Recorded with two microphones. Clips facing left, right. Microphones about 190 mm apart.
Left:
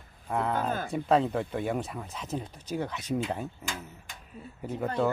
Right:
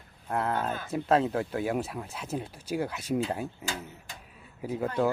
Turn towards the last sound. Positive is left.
turn(degrees=-10)  # may be behind; listen again after turning